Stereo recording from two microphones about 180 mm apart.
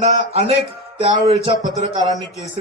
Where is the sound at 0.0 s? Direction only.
35° right (ahead or behind).